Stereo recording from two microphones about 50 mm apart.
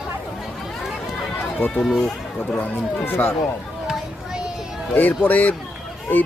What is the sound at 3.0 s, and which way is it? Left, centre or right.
Speech, left.